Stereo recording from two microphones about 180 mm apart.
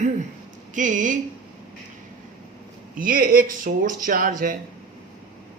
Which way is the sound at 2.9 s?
50° right (ahead or behind).